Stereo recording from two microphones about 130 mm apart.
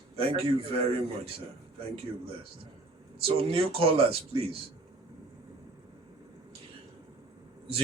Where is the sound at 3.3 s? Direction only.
45° right (ahead or behind).